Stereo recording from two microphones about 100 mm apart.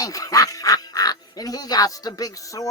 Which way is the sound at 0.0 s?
35° left (ahead or behind).